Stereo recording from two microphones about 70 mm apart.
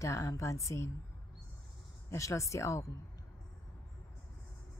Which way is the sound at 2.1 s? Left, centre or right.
Left.